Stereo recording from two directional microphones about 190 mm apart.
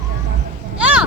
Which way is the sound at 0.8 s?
5° right (ahead or behind).